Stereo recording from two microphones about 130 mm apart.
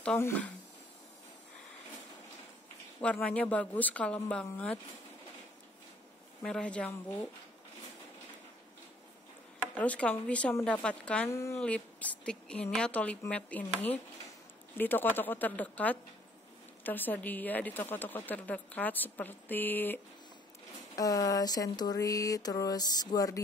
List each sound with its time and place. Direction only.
3.0 s speech: 5° left (ahead or behind)
6.4 s speech: 5° left (ahead or behind)
9.8 s speech: 10° left (ahead or behind)
11.2 s a sound: 20° left (ahead or behind)
11.6 s speech: 10° left (ahead or behind)
14.8 s speech: 15° left (ahead or behind)
20.9 s a sound: 30° left (ahead or behind)